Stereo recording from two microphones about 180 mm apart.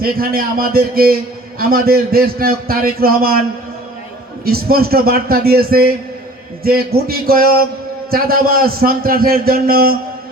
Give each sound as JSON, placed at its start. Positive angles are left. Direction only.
{"t": 0.0, "sound": "a man's voice", "side_deg": -55}
{"t": 4.4, "sound": "a man's voice", "side_deg": -55}